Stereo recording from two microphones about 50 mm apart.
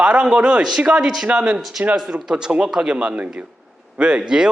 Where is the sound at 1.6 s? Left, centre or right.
Centre.